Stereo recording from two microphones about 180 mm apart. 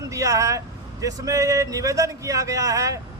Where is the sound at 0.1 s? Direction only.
15° right (ahead or behind).